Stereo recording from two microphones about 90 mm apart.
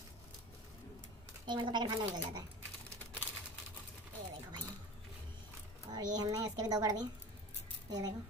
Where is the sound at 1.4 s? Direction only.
60° right (ahead or behind).